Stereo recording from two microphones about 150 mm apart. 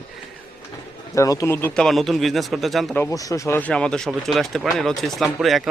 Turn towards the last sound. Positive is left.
turn(degrees=0)  # may be behind; listen again after turning